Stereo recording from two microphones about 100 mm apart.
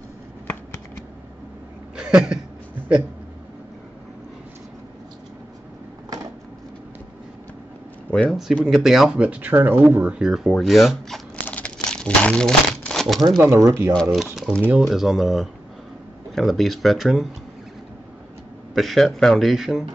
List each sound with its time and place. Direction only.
2.0 s a sound: 10° right (ahead or behind)
8.1 s speech: 10° left (ahead or behind)
8.6 s speech: 5° right (ahead or behind); by 10.1 s 20° right (ahead or behind)
10.1 s speech: 5° right (ahead or behind)
11.4 s crumpling: 15° left (ahead or behind)
13.4 s speech: 30° right (ahead or behind)
14.1 s speech: 5° right (ahead or behind)
18.8 s speech: centre (ahead or behind)